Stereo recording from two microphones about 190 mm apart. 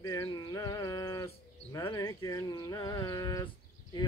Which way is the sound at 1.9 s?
20° left (ahead or behind).